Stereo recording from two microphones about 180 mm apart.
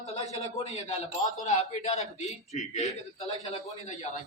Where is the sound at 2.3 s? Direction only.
Centre (ahead or behind).